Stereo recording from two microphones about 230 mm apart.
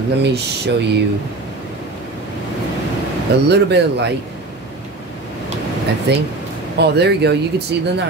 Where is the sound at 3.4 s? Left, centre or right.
Right.